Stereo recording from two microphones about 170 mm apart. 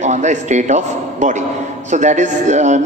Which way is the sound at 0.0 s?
45° right (ahead or behind).